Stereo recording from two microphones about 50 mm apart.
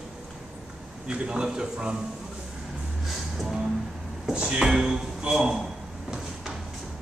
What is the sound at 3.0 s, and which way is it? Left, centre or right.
Music, centre.